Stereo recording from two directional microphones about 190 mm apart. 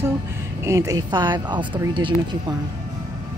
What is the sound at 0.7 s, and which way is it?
Speech, 15° right (ahead or behind).